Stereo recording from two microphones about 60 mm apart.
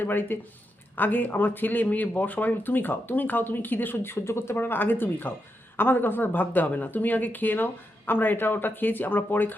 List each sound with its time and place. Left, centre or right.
0.0 s speech: left